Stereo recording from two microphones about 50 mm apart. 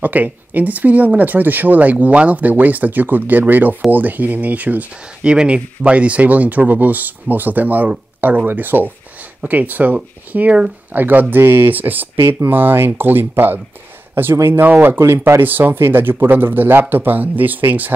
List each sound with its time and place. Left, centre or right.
0.0 s speech: right
5.3 s speech: centre; by 15.0 s right
15.0 s speech: right
15.4 s speech: right